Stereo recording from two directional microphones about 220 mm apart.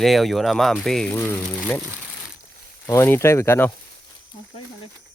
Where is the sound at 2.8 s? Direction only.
10° left (ahead or behind).